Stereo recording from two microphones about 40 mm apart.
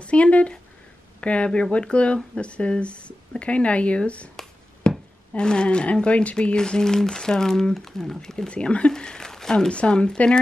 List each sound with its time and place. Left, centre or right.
0.0 s speech: left
4.9 s a sound: centre
5.4 s speech: left
6.5 s speech: centre
8.5 s speech: left
9.7 s speech: left